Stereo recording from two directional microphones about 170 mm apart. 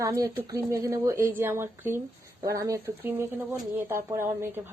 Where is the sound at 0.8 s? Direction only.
15° right (ahead or behind).